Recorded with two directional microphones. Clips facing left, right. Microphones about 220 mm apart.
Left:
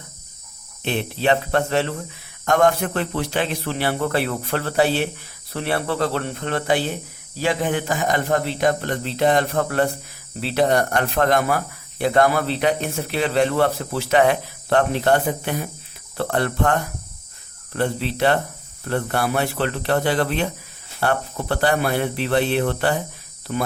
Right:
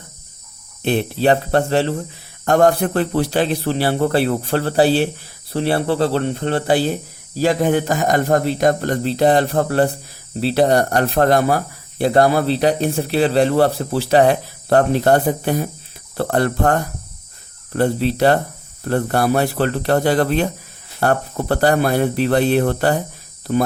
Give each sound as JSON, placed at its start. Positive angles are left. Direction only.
{"t": 0.8, "sound": "speech", "side_deg": -40}